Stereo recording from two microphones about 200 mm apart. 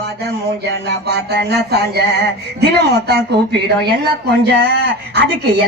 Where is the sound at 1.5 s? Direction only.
55° right (ahead or behind).